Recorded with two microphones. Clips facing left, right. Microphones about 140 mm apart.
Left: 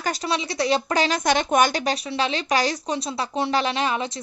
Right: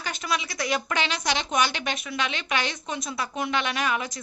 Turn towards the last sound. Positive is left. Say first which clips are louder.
# left 3 dB
turn(degrees=30)  # may be behind; listen again after turning